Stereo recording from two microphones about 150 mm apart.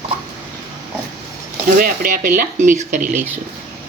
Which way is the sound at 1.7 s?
70° right (ahead or behind).